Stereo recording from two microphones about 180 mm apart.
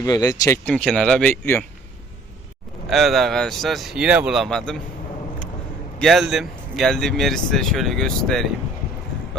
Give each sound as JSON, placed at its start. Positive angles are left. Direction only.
{"t": 0.0, "sound": "speech", "side_deg": 20}
{"t": 0.7, "sound": "speech", "side_deg": 5}
{"t": 2.8, "sound": "speech", "side_deg": 0}
{"t": 6.0, "sound": "speech", "side_deg": 0}